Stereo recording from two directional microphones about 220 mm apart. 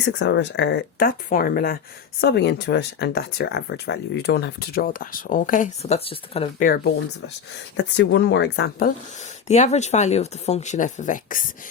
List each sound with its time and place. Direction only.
0.0 s speech: 55° left (ahead or behind); by 6.7 s 25° left (ahead or behind)
7.8 s speech: 55° left (ahead or behind)
9.5 s speech: 30° left (ahead or behind)